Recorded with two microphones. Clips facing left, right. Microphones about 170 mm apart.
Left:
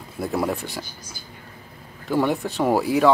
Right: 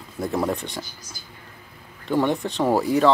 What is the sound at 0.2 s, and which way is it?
Speech, 10° left (ahead or behind).